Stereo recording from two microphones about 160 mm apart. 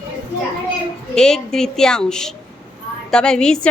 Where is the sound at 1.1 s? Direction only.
5° left (ahead or behind).